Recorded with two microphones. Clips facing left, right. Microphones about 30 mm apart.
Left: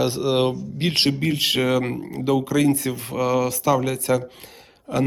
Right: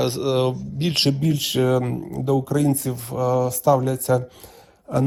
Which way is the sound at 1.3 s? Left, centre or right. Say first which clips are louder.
Even; left.